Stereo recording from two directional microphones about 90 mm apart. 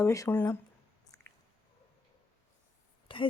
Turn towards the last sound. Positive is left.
turn(degrees=70)  # may be behind; listen again after turning